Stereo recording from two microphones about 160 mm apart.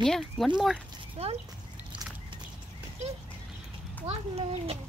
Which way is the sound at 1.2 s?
40° right (ahead or behind).